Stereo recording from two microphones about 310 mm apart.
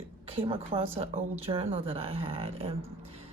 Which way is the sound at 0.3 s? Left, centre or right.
Centre.